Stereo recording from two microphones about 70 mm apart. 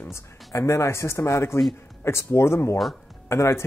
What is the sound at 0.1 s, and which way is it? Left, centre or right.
Speech, left.